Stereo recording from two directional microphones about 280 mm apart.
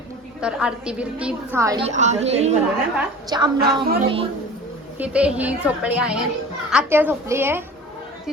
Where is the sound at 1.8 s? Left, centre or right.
Right.